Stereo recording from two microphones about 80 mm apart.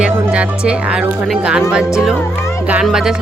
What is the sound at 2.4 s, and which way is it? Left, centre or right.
Music, left.